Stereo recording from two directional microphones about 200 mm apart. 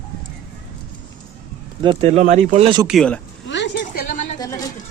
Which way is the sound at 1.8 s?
25° right (ahead or behind).